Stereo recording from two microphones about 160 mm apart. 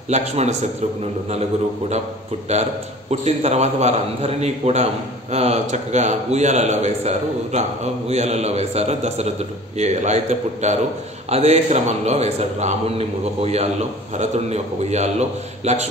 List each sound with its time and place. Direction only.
0.1 s speech: 45° right (ahead or behind)
3.1 s speech: 45° right (ahead or behind)